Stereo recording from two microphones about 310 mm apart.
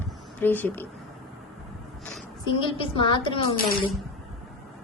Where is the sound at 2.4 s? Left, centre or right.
Centre.